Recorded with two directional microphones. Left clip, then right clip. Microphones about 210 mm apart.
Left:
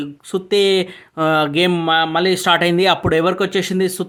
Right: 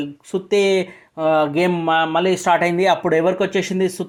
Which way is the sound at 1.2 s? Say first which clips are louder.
Left 1 dB; 55° left (ahead or behind).